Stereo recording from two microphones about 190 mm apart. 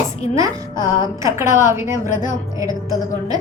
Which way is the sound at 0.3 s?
15° right (ahead or behind).